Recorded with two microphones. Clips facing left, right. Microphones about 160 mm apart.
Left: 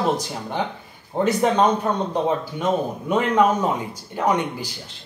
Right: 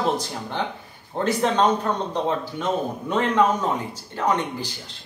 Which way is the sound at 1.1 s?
10° left (ahead or behind).